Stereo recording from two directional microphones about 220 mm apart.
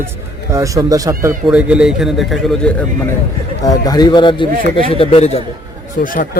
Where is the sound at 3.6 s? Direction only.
15° left (ahead or behind); by 6.4 s 40° left (ahead or behind).